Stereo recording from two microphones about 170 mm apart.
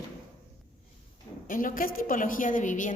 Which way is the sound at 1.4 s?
55° left (ahead or behind).